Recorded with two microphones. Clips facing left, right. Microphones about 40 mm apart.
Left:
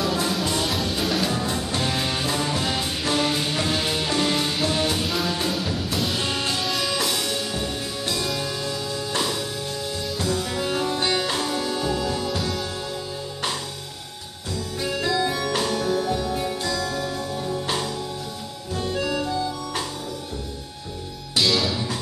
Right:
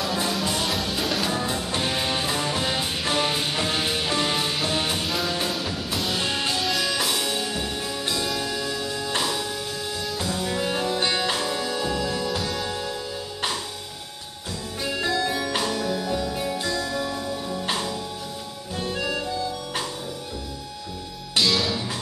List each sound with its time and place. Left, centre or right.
0.0 s music: centre
9.2 s music: centre
12.6 s music: centre
12.9 s music: centre
14.8 s music: centre
15.4 s music: centre
15.8 s music: left
16.6 s music: centre
19.2 s music: centre
21.4 s music: centre